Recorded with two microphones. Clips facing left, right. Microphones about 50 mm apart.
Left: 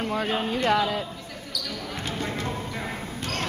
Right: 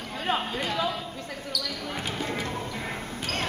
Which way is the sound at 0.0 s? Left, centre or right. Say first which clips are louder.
Left 8 dB; left.